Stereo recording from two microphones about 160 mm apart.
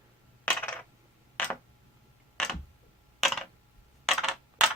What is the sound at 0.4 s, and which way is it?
Coin, 15° left (ahead or behind).